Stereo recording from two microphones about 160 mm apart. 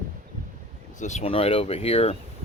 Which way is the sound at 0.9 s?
45° left (ahead or behind).